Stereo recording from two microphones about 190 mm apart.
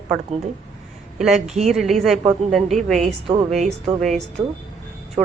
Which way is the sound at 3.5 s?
Centre (ahead or behind).